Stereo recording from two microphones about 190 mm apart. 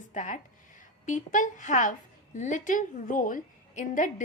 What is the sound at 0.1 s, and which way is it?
A woman's voice, 40° left (ahead or behind).